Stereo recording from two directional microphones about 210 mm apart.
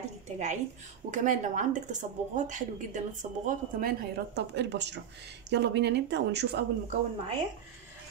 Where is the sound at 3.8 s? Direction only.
55° right (ahead or behind).